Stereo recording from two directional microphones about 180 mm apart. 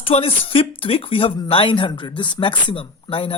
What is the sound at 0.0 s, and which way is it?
Speech, 35° left (ahead or behind).